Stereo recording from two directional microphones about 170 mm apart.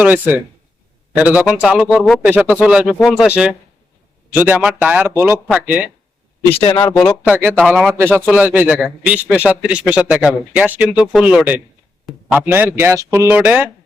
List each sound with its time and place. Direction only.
0.0 s a man's voice: 10° right (ahead or behind)
6.5 s speech: 30° left (ahead or behind)
6.9 s speech: 5° left (ahead or behind)
7.3 s a man's voice: 10° right (ahead or behind)